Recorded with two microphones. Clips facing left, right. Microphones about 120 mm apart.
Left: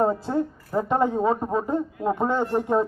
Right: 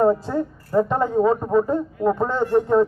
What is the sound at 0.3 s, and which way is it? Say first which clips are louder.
A woman's voice: right 1 dB; 20° left (ahead or behind).